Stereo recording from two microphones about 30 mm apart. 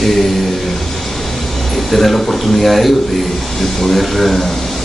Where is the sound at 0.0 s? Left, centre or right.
Centre.